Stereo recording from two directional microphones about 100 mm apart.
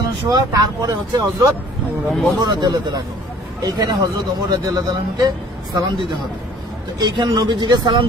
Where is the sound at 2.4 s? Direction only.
45° right (ahead or behind).